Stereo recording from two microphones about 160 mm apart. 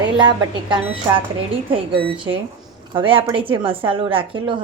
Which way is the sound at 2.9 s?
35° right (ahead or behind).